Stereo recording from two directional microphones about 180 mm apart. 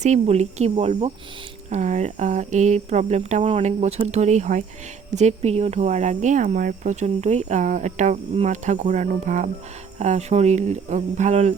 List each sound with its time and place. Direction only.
0.0 s speech: 40° right (ahead or behind)